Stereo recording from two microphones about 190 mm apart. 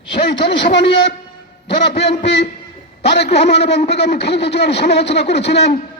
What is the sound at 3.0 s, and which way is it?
A man's voice, 60° left (ahead or behind).